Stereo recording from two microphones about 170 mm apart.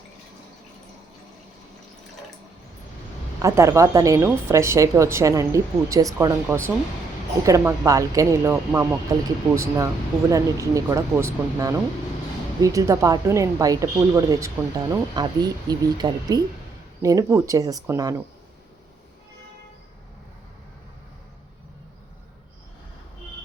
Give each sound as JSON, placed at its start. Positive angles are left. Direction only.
{"t": 3.4, "sound": "a woman's voice", "side_deg": -15}